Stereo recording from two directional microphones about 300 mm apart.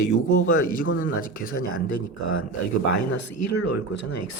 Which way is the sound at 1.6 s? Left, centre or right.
Left.